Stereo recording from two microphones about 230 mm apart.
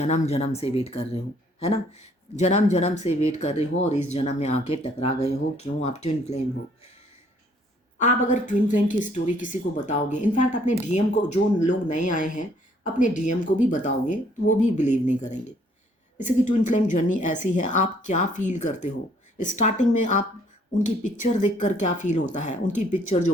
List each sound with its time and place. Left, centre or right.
0.0 s speech: left
7.9 s speech: left
21.6 s speech: left